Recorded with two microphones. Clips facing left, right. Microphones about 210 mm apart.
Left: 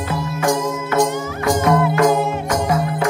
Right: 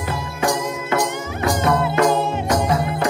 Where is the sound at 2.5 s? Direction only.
25° left (ahead or behind).